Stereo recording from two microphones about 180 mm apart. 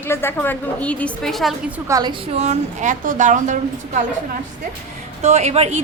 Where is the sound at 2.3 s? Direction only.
40° right (ahead or behind).